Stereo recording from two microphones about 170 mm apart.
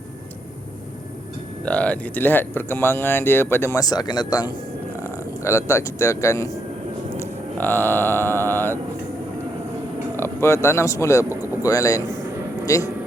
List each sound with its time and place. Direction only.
1.6 s speech: 5° left (ahead or behind)
7.6 s speech: 10° left (ahead or behind)
10.2 s speech: 15° left (ahead or behind)